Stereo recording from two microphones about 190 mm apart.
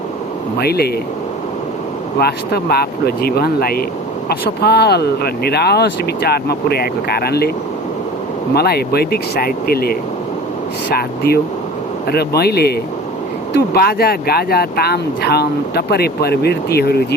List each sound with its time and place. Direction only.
0.6 s speech: 55° left (ahead or behind)
2.1 s speech: 55° left (ahead or behind)
8.5 s speech: 55° left (ahead or behind)